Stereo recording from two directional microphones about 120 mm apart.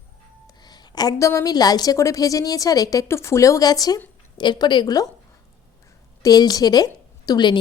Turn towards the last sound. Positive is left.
turn(degrees=35)  # may be behind; listen again after turning